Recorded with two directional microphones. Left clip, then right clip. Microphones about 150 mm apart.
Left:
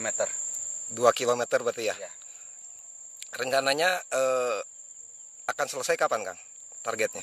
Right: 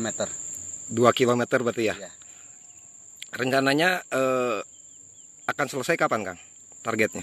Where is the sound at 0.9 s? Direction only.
5° left (ahead or behind).